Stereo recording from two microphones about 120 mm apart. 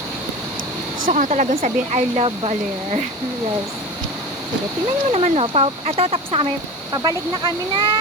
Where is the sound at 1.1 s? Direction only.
85° right; by 2.6 s 55° right (ahead or behind).